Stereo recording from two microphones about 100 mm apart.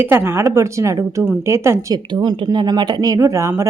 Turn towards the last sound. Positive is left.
turn(degrees=-30)  # may be behind; listen again after turning